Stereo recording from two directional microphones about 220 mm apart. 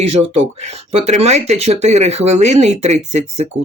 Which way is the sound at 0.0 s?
25° right (ahead or behind).